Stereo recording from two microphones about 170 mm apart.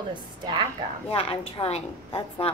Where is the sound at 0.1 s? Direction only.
30° right (ahead or behind).